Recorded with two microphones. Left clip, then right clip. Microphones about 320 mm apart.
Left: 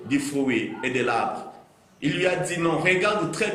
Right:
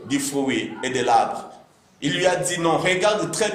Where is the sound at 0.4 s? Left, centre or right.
Right.